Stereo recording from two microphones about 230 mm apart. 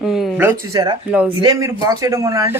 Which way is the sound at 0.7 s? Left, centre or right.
Centre.